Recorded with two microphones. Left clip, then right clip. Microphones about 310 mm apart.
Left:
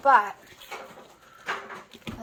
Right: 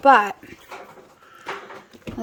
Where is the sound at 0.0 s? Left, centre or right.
Right.